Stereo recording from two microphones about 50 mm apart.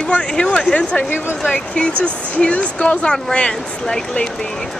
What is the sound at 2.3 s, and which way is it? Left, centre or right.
Speech, left.